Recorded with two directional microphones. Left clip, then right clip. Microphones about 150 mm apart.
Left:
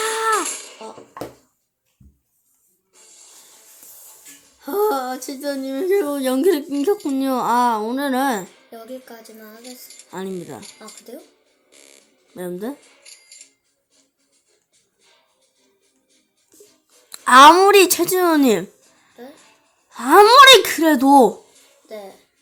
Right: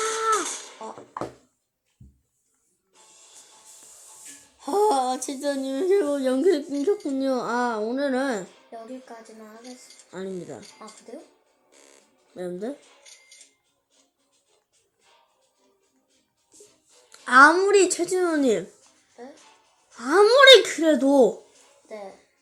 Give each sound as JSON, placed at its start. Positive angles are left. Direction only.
{"t": 0.0, "sound": "a sound", "side_deg": 35}
{"t": 0.4, "sound": "a sound", "side_deg": 15}
{"t": 4.6, "sound": "speech", "side_deg": 0}
{"t": 6.1, "sound": "speech", "side_deg": 30}
{"t": 8.5, "sound": "music", "side_deg": 35}
{"t": 10.1, "sound": "speech", "side_deg": 30}
{"t": 11.7, "sound": "a sound", "side_deg": -20}
{"t": 12.3, "sound": "speech", "side_deg": 30}
{"t": 17.1, "sound": "a sound", "side_deg": 45}
{"t": 17.6, "sound": "a woman's voice", "side_deg": 50}
{"t": 19.9, "sound": "speech", "side_deg": 35}
{"t": 20.2, "sound": "a woman's voice", "side_deg": 55}
{"t": 21.8, "sound": "speech", "side_deg": 35}